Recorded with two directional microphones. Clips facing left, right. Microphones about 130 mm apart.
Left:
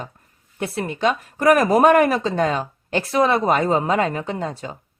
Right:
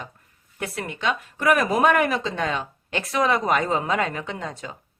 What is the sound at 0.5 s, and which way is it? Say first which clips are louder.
A woman's voice: left 6 dB; 30° left (ahead or behind).